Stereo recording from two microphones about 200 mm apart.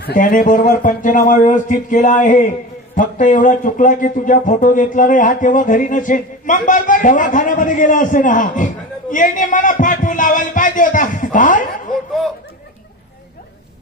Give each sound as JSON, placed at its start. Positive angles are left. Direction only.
{"t": 0.0, "sound": "speech", "side_deg": 45}